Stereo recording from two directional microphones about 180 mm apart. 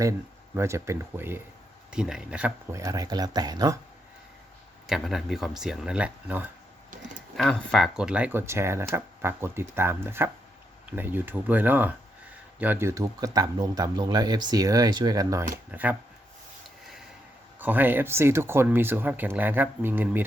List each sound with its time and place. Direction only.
0.5 s speech: 15° right (ahead or behind)
2.7 s speech: 20° right (ahead or behind)
4.9 s speech: centre (ahead or behind)
7.3 s speech: 5° left (ahead or behind); by 15.4 s 20° right (ahead or behind)
15.7 s speech: 10° right (ahead or behind)
17.6 s speech: 10° right (ahead or behind)